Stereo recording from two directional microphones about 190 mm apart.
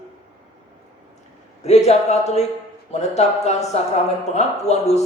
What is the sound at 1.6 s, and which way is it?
Speech, 35° left (ahead or behind).